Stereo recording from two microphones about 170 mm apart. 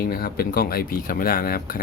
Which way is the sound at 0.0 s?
60° left (ahead or behind).